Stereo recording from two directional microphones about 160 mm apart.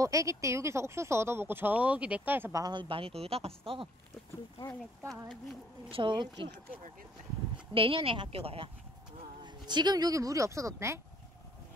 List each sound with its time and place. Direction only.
0.0 s speech: 20° right (ahead or behind)
2.6 s speech: 30° right (ahead or behind)
5.9 s speech: 30° right (ahead or behind)
7.5 s speech: 35° right (ahead or behind); by 11.0 s 20° right (ahead or behind)